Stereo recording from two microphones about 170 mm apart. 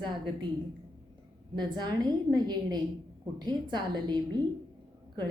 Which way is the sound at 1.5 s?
25° right (ahead or behind).